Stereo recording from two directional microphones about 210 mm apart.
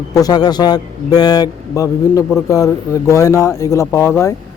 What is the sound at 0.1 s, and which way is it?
A man's voice, 20° left (ahead or behind).